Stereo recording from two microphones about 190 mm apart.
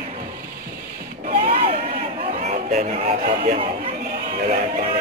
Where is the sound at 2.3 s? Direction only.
35° right (ahead or behind).